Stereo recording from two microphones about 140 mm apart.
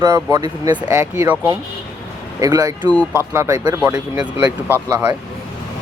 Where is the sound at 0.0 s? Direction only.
25° right (ahead or behind).